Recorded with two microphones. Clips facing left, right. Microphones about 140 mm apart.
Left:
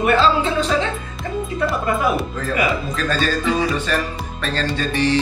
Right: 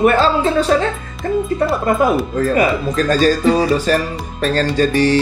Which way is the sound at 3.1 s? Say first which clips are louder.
Right 7 dB; 40° right (ahead or behind).